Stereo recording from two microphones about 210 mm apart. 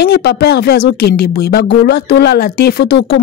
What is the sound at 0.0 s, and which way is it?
Speech, 50° left (ahead or behind).